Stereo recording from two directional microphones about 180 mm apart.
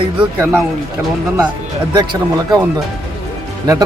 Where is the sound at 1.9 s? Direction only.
20° right (ahead or behind).